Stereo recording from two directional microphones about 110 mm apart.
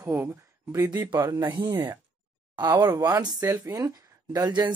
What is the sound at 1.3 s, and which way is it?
Speech, 40° right (ahead or behind).